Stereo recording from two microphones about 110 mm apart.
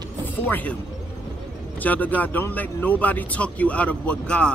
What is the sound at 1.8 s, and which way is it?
Speech, 15° left (ahead or behind).